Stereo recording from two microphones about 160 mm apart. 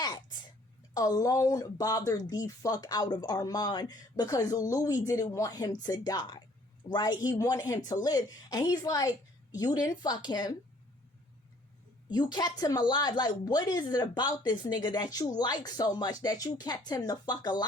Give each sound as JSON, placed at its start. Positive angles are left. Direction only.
{"t": 0.0, "sound": "a sound", "side_deg": 30}
{"t": 0.9, "sound": "speech", "side_deg": 25}
{"t": 12.1, "sound": "speech", "side_deg": 25}